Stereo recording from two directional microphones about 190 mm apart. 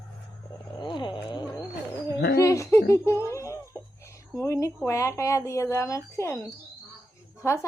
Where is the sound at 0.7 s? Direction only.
25° left (ahead or behind).